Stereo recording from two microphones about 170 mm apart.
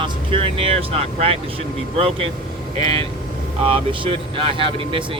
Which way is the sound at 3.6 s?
30° right (ahead or behind).